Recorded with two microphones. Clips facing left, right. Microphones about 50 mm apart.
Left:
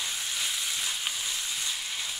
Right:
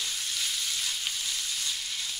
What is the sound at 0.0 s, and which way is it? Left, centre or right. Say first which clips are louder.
Frying: left 1 dB; centre.